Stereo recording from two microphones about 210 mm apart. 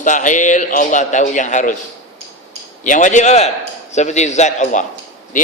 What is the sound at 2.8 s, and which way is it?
A man's voice, 35° left (ahead or behind).